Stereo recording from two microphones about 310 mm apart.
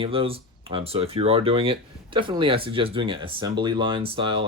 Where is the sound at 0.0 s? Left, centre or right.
Centre.